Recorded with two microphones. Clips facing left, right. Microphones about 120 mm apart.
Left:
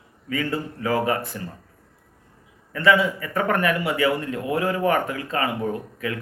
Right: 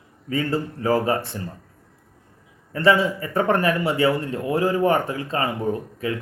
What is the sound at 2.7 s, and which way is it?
Speech, 35° right (ahead or behind).